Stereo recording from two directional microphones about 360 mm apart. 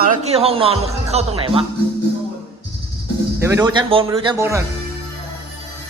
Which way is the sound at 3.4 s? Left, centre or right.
Centre.